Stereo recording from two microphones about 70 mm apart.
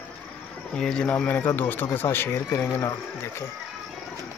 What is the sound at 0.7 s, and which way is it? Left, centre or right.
Speech, centre.